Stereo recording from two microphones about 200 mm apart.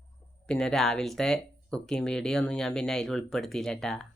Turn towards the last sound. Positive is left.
turn(degrees=0)  # may be behind; listen again after turning